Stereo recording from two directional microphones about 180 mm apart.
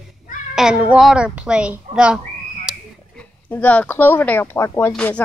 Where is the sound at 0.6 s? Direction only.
5° right (ahead or behind).